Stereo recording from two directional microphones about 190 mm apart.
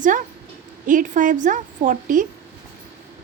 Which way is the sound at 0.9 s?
45° right (ahead or behind).